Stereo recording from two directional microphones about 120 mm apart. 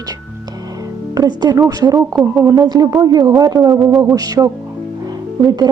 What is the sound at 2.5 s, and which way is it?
Speech, 35° right (ahead or behind).